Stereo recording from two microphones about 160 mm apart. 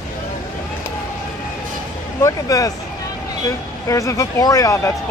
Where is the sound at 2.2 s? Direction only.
20° left (ahead or behind).